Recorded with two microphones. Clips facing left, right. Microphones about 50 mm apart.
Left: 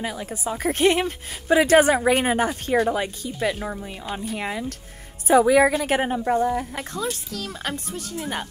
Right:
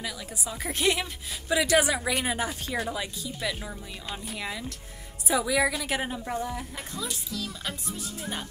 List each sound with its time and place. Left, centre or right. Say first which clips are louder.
0.0 s a woman's voice: left 7 dB; left
8.2 s a woman's voice: left 8 dB; left